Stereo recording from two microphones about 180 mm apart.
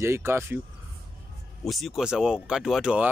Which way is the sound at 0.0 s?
15° right (ahead or behind).